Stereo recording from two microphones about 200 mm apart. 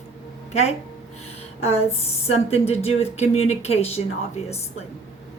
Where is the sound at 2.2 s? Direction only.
30° left (ahead or behind).